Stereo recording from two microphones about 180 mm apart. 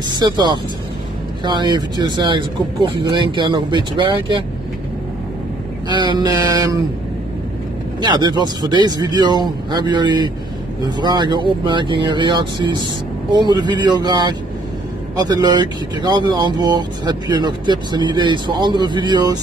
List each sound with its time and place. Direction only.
0.2 s speech: 25° right (ahead or behind)
5.9 s speech: 25° right (ahead or behind)
8.0 s speech: 25° right (ahead or behind)